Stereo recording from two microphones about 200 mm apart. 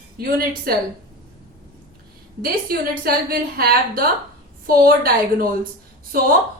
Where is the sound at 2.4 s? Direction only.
50° right (ahead or behind).